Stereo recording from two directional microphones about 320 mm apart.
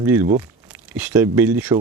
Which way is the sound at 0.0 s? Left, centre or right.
Centre.